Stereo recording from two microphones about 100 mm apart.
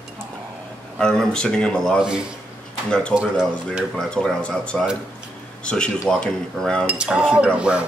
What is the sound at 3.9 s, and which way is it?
Speech, 10° left (ahead or behind).